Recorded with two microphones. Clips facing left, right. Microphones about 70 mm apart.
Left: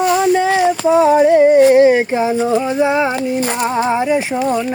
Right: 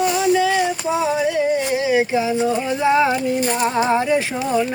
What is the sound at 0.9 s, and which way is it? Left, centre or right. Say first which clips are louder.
Female singing: left 12 dB; left.